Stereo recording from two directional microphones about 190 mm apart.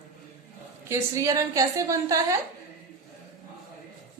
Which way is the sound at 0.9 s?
15° right (ahead or behind).